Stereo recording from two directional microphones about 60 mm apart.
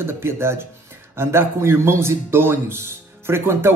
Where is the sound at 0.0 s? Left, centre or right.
Right.